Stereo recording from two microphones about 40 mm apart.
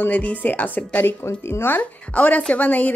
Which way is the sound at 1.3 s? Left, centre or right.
Left.